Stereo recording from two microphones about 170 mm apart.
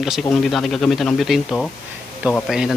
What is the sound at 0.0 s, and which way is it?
Speech, centre (ahead or behind).